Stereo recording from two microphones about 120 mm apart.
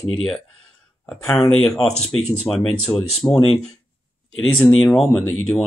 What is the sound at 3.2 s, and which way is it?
Speech, 15° left (ahead or behind).